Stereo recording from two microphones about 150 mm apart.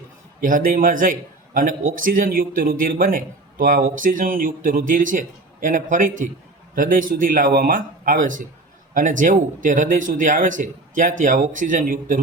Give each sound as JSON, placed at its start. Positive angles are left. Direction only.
{"t": 0.4, "sound": "a man's voice", "side_deg": -65}